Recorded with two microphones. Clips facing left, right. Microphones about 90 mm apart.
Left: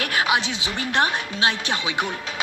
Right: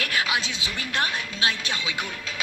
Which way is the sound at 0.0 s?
25° left (ahead or behind).